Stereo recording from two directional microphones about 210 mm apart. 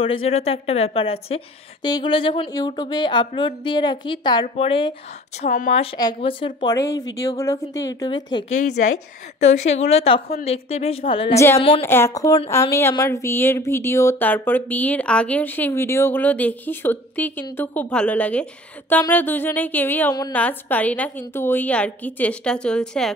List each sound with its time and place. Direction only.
0.0 s a woman's voice: 25° left (ahead or behind)
9.4 s a woman's voice: 30° left (ahead or behind)
11.3 s speech: 15° left (ahead or behind)